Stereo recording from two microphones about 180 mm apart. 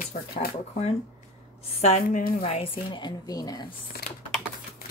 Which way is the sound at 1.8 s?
40° left (ahead or behind).